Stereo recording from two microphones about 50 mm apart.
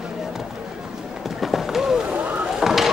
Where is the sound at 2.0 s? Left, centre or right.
Right.